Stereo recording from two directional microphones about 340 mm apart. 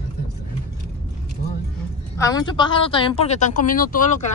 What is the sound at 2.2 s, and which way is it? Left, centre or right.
Speech, centre.